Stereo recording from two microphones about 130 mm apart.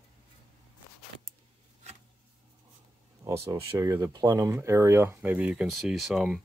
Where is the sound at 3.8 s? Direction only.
25° right (ahead or behind).